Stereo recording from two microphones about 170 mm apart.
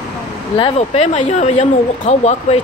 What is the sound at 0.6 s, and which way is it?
Speech, 40° left (ahead or behind).